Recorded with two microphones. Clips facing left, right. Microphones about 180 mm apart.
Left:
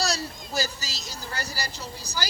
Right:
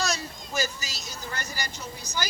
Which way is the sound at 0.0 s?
35° left (ahead or behind).